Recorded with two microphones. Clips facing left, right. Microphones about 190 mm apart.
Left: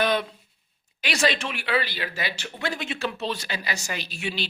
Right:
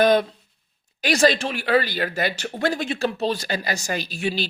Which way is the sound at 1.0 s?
40° right (ahead or behind).